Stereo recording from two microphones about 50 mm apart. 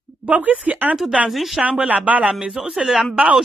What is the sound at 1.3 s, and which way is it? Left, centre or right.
Speech, centre.